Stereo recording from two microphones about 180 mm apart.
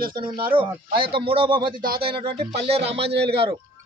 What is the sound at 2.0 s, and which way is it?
Speech, 30° right (ahead or behind).